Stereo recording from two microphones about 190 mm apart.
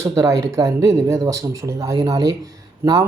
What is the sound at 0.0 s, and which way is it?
Speech, 15° right (ahead or behind).